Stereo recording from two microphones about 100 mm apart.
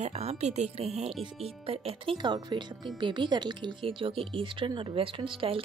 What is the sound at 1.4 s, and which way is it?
Speech, 65° right (ahead or behind).